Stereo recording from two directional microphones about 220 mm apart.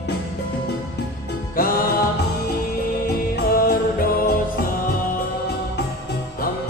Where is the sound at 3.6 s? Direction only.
45° left (ahead or behind).